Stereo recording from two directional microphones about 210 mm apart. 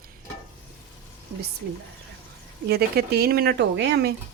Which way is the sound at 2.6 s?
50° right (ahead or behind).